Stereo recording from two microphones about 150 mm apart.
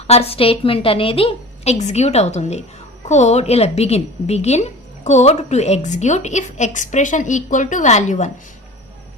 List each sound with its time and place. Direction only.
0.1 s a woman's voice: 40° left (ahead or behind)